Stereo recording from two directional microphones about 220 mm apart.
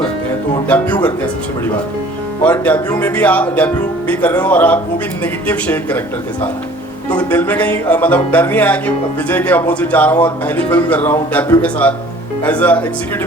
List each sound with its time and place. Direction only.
0.7 s speech: 5° left (ahead or behind)
7.1 s speech: 5° left (ahead or behind)